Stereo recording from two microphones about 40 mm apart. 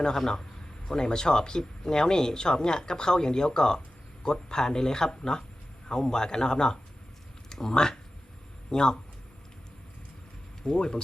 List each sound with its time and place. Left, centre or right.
0.9 s speech: centre
10.6 s speech: left